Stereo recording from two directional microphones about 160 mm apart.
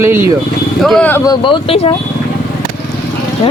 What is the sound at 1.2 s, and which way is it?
Speech, 30° left (ahead or behind).